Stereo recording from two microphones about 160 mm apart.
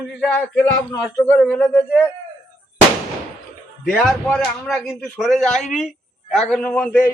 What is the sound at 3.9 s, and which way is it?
A man's voice, 5° left (ahead or behind).